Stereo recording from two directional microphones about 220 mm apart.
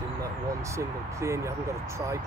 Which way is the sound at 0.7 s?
15° right (ahead or behind).